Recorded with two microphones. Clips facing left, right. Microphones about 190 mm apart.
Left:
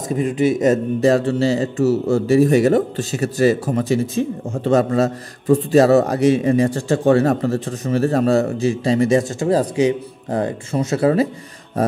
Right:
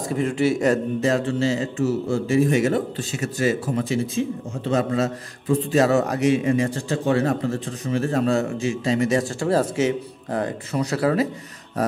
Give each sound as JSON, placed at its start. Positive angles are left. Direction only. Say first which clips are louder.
{"t": 0.1, "sound": "speech", "louder": "left 4 dB", "side_deg": 15}
{"t": 1.0, "sound": "a man's voice", "louder": "left 7 dB", "side_deg": 35}
{"t": 9.4, "sound": "speech", "louder": "left 4 dB", "side_deg": 15}